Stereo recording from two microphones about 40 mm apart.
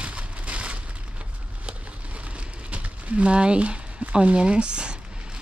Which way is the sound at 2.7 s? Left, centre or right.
Right.